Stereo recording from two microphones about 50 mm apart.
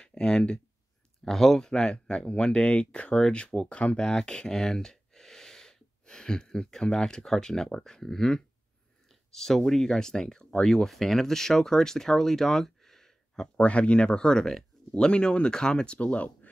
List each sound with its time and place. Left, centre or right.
0.0 s speech: centre
13.6 s speech: left